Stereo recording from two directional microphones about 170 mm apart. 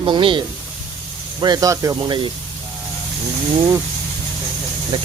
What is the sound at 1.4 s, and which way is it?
Speech, 20° right (ahead or behind).